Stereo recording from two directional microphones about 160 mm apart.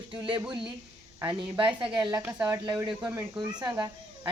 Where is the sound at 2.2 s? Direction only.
10° right (ahead or behind).